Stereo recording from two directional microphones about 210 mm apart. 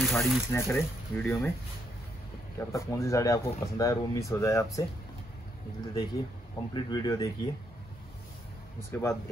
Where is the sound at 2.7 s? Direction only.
15° left (ahead or behind).